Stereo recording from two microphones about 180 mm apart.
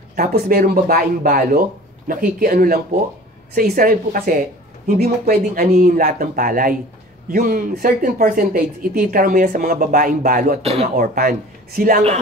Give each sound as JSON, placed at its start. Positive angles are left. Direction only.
{"t": 0.1, "sound": "speech", "side_deg": -55}
{"t": 10.6, "sound": "speech", "side_deg": -35}
{"t": 11.0, "sound": "speech", "side_deg": -55}